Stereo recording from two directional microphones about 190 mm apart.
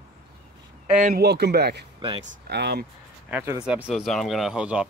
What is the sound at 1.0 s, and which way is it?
Speech, 55° right (ahead or behind).